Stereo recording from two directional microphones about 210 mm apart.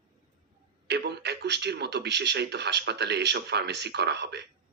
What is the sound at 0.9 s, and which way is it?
Speech, 50° right (ahead or behind).